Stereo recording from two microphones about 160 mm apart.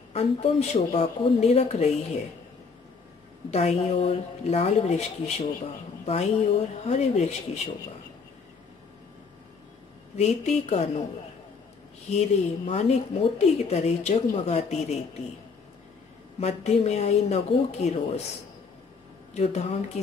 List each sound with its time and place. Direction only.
0.1 s speech: 40° left (ahead or behind)
3.4 s a woman's voice: 40° left (ahead or behind)
10.1 s a woman's voice: 45° left (ahead or behind)
12.1 s a woman's voice: 45° left (ahead or behind)
16.3 s a woman's voice: 45° left (ahead or behind)
19.3 s speech: 40° left (ahead or behind)